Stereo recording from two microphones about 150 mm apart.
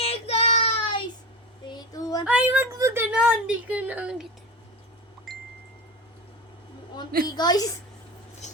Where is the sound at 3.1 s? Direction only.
10° right (ahead or behind).